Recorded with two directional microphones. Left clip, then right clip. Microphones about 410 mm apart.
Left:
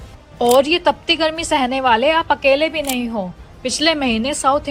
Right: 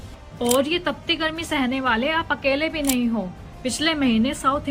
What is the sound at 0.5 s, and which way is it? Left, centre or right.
A woman's voice, centre.